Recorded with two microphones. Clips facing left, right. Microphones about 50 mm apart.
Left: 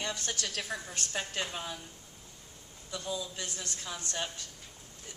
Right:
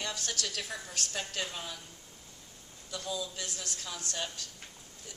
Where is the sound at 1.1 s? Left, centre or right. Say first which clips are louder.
Left 3 dB; left.